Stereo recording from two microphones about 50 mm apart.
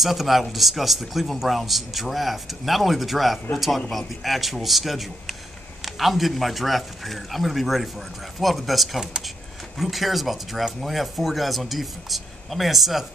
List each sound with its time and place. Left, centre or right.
0.0 s a man's voice: centre